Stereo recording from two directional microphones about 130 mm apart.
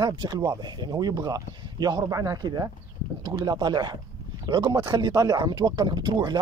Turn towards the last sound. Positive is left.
turn(degrees=-35)  # may be behind; listen again after turning